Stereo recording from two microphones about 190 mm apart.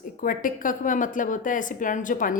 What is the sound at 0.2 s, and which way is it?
A woman's voice, 45° left (ahead or behind).